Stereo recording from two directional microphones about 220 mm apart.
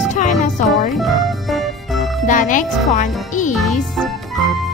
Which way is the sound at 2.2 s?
35° left (ahead or behind).